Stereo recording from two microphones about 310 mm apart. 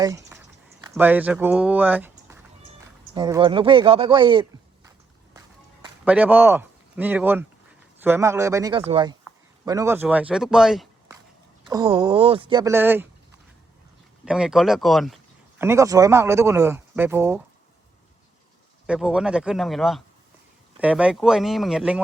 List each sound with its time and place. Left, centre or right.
0.0 s speech: centre
6.1 s speech: centre
11.7 s speech: centre
14.3 s speech: centre
18.9 s speech: centre